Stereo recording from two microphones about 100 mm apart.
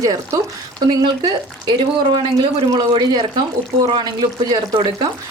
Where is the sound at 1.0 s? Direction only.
45° right (ahead or behind).